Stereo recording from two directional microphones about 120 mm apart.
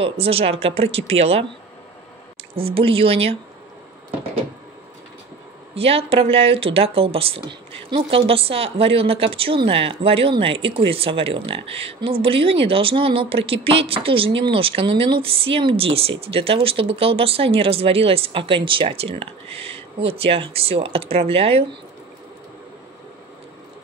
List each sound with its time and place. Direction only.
0.0 s speech: 55° right (ahead or behind)
2.5 s speech: 50° right (ahead or behind)
5.8 s speech: 55° right (ahead or behind)